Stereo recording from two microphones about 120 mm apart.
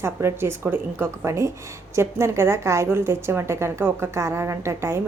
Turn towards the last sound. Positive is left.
turn(degrees=-20)  # may be behind; listen again after turning